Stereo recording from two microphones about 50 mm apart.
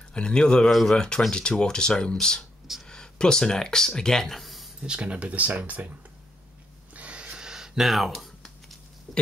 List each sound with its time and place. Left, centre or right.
0.1 s speech: centre
4.8 s speech: right
7.0 s a sound: right; by 9.2 s centre